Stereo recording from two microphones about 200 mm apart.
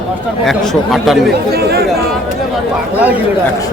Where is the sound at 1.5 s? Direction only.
50° right (ahead or behind).